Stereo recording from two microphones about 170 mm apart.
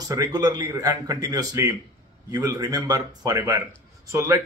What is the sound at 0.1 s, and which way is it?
A man's voice, 20° right (ahead or behind).